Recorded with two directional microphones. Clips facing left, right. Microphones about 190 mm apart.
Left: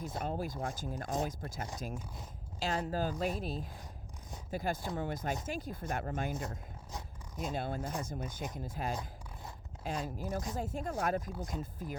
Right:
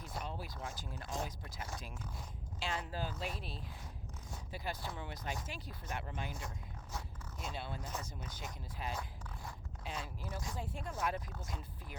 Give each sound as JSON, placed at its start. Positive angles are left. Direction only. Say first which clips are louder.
{"t": 0.2, "sound": "speech", "louder": "left 7 dB", "side_deg": 45}